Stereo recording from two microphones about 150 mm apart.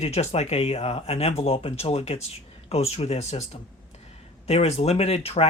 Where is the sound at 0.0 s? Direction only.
45° left (ahead or behind).